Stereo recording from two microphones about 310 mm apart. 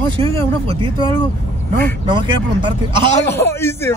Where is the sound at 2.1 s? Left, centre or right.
Centre.